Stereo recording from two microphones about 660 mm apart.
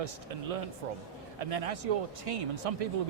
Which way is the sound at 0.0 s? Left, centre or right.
Right.